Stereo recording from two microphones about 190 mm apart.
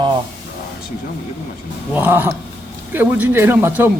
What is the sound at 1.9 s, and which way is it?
A man's voice, 10° right (ahead or behind).